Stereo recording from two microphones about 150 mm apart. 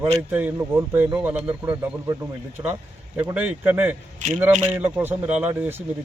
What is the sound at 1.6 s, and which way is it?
A man's voice, 20° right (ahead or behind).